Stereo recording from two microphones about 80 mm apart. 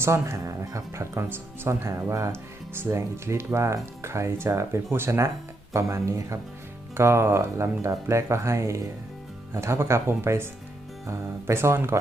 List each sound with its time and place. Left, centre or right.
0.0 s speech: right